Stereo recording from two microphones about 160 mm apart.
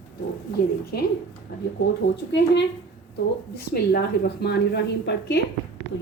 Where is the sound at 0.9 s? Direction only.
80° left.